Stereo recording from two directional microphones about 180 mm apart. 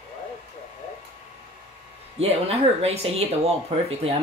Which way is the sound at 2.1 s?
35° right (ahead or behind).